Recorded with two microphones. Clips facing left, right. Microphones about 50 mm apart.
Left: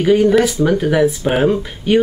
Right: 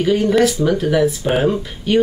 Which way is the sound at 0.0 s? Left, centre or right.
Centre.